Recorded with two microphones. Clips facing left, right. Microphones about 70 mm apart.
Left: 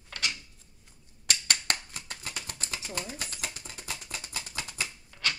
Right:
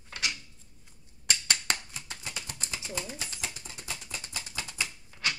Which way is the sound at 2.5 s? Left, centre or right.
Left.